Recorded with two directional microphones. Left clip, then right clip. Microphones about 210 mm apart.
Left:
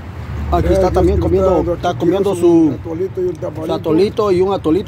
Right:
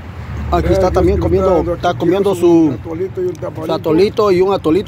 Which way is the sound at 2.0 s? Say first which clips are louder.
Even; 10° right (ahead or behind).